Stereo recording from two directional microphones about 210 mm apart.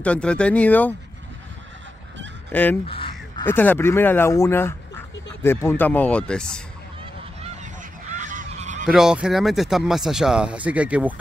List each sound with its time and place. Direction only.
0.0 s speech: 5° left (ahead or behind)
2.5 s speech: 10° left (ahead or behind)
2.9 s crow: 25° left (ahead or behind)
3.4 s speech: 10° left (ahead or behind)
8.2 s goose: 35° right (ahead or behind)
8.8 s speech: 5° right (ahead or behind)